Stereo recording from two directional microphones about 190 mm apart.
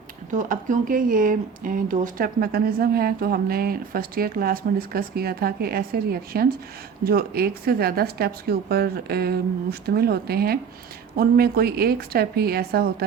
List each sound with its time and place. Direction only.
0.3 s a woman's voice: 45° right (ahead or behind)